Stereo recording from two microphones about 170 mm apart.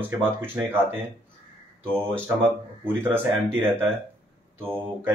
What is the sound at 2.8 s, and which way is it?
Speech, 15° right (ahead or behind).